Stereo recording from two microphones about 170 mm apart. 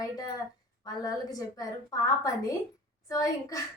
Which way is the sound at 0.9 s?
20° left (ahead or behind).